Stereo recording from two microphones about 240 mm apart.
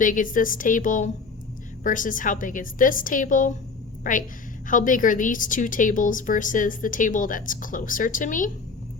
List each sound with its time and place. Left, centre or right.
0.0 s a woman's voice: left